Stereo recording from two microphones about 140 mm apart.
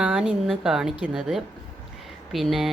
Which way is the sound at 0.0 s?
5° right (ahead or behind).